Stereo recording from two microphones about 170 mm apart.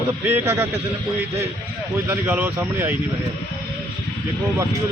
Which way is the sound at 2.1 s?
10° right (ahead or behind).